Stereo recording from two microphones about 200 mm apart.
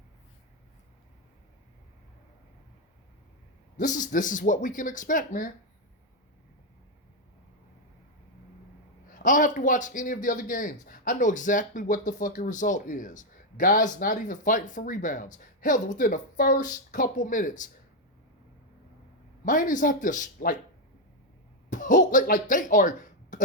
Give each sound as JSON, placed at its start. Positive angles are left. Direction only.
{"t": 3.8, "sound": "a man's voice", "side_deg": 40}
{"t": 9.1, "sound": "a man's voice", "side_deg": 40}
{"t": 19.5, "sound": "a man's voice", "side_deg": 40}
{"t": 21.7, "sound": "speech", "side_deg": 40}